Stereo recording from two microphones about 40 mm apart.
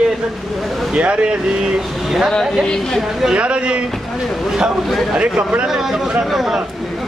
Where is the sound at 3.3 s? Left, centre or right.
Right.